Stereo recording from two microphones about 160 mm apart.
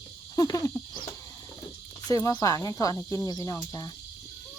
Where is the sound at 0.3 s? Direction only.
20° left (ahead or behind).